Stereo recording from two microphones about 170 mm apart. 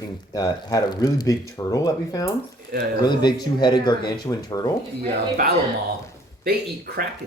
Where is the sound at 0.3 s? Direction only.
20° left (ahead or behind).